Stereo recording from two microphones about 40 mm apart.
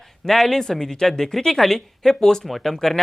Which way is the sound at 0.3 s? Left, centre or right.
Centre.